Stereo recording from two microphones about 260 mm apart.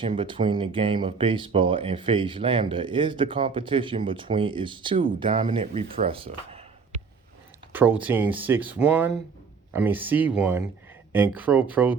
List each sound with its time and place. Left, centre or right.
0.0 s speech: centre
7.7 s speech: centre